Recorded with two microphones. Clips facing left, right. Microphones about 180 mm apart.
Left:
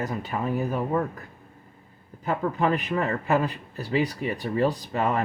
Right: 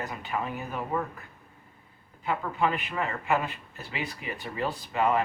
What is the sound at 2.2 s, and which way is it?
Speech, 40° left (ahead or behind).